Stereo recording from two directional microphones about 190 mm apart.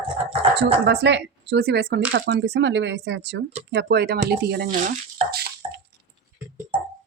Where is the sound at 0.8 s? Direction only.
65° right (ahead or behind).